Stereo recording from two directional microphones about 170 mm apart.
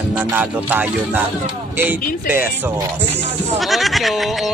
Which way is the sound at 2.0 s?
55° left (ahead or behind).